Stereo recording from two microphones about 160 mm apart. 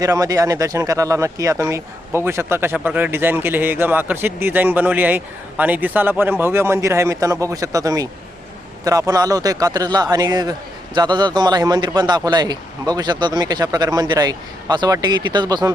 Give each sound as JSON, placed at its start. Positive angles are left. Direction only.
{"t": 0.0, "sound": "a man's voice", "side_deg": -20}